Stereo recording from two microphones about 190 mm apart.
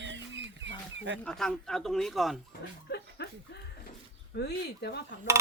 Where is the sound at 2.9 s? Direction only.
60° left (ahead or behind).